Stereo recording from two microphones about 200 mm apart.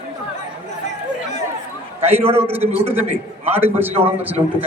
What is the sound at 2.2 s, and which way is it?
A man's voice, 10° right (ahead or behind).